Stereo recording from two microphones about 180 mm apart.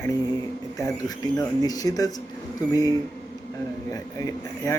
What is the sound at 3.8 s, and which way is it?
Speech, 15° left (ahead or behind).